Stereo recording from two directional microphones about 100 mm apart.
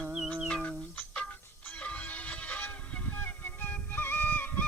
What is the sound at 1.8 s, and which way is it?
Music, 15° left (ahead or behind).